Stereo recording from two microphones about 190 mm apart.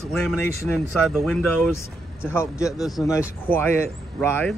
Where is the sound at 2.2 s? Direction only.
15° left (ahead or behind).